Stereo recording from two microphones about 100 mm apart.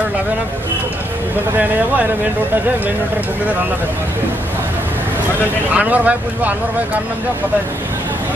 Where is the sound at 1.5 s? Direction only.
15° right (ahead or behind).